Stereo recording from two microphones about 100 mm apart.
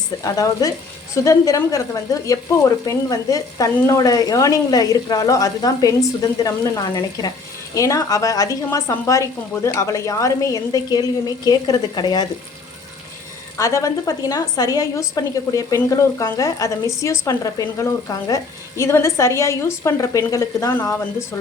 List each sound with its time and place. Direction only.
0.2 s speech: 35° left (ahead or behind)
13.6 s a woman's voice: 35° left (ahead or behind)